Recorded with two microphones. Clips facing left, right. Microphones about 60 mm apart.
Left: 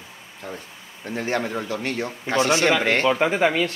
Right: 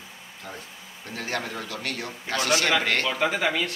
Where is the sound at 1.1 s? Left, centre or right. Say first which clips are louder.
Left 6 dB; left.